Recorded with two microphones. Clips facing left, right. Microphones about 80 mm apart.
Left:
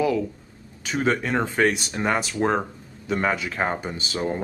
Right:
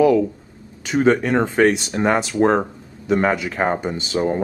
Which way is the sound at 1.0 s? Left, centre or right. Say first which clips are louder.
Right 6 dB; right.